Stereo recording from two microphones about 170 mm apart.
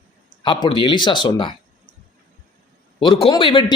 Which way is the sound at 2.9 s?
30° left (ahead or behind).